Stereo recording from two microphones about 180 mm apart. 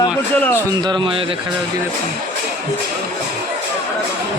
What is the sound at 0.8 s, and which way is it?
Speech, 25° right (ahead or behind).